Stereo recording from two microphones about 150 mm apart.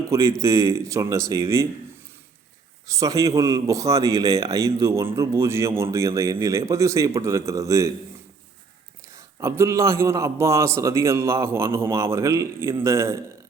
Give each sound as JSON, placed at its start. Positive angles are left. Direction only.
{"t": 0.1, "sound": "a man's voice", "side_deg": -20}
{"t": 2.9, "sound": "a man's voice", "side_deg": -20}
{"t": 9.1, "sound": "a man's voice", "side_deg": -20}